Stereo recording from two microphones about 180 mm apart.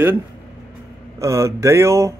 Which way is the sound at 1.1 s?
15° right (ahead or behind).